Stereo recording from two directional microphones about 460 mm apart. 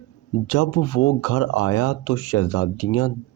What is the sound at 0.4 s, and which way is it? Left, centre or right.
Speech, left.